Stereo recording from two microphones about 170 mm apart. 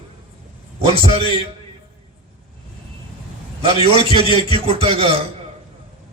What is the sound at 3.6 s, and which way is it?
A man's voice, 35° right (ahead or behind).